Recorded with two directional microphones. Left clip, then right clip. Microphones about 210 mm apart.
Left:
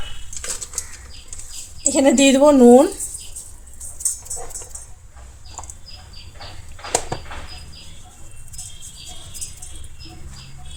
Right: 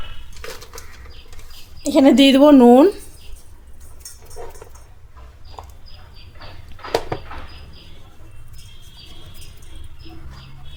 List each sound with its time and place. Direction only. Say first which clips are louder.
1.8 s speech: right 2 dB; 45° right (ahead or behind)